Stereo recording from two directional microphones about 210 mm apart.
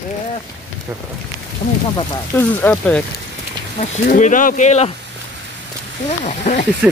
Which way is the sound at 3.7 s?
35° left (ahead or behind).